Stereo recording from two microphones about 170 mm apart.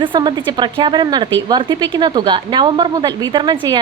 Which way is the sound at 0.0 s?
30° right (ahead or behind).